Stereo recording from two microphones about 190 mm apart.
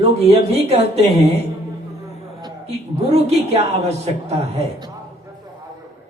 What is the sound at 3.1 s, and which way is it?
Speech, 35° right (ahead or behind).